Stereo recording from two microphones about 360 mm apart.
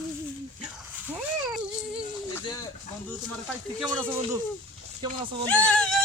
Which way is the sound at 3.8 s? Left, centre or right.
Centre.